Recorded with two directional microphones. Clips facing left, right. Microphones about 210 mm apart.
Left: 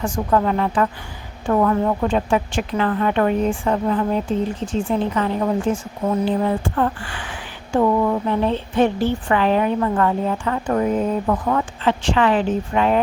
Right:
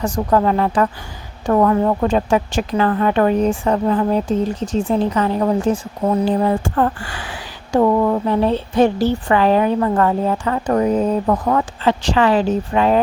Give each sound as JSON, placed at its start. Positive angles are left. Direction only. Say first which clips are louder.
{"t": 0.0, "sound": "speech", "louder": "right 3 dB", "side_deg": -40}